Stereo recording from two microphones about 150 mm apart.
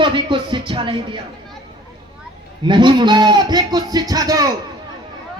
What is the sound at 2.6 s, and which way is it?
Speech, 30° right (ahead or behind).